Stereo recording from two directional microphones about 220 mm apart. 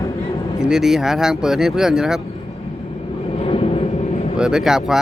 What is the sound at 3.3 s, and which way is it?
Vehicle, 25° left (ahead or behind).